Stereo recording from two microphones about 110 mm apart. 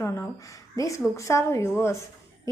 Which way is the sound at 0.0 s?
25° left (ahead or behind).